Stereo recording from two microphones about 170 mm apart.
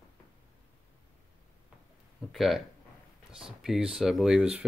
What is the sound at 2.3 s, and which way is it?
Speech, centre (ahead or behind).